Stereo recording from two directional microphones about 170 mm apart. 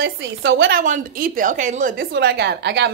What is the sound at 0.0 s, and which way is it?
Speech, 90° right.